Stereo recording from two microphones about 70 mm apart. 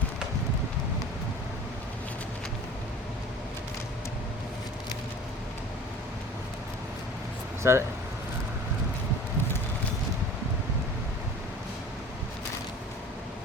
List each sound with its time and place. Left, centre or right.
7.6 s speech: right